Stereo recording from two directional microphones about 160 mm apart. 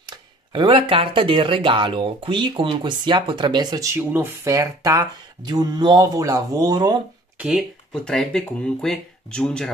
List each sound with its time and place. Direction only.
0.0 s speech: 30° right (ahead or behind)
7.3 s speech: 5° right (ahead or behind)